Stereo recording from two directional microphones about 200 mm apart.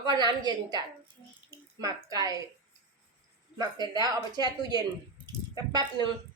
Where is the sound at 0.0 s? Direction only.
20° right (ahead or behind).